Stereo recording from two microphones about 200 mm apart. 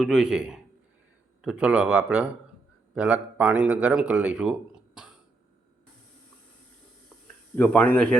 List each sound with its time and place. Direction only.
0.0 s a man's voice: centre (ahead or behind)
7.5 s speech: 10° left (ahead or behind)